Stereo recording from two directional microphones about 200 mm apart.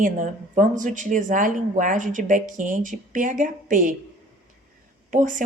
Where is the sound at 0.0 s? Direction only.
40° right (ahead or behind).